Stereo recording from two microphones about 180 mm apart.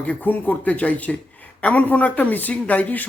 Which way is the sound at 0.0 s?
10° left (ahead or behind).